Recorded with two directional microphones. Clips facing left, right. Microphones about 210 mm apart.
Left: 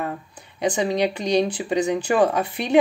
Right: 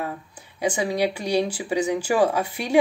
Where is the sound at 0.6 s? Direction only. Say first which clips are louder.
Left 2 dB; 10° right (ahead or behind).